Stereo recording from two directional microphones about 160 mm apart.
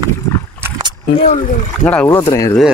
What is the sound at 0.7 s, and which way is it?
Rowboat, 20° right (ahead or behind).